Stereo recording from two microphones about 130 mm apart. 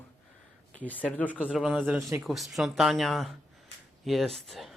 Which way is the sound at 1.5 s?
5° right (ahead or behind).